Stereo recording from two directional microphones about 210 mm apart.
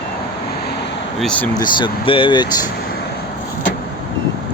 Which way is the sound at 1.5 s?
20° left (ahead or behind).